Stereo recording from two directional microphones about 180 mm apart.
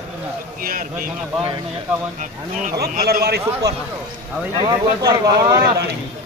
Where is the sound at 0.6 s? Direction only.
50° right (ahead or behind).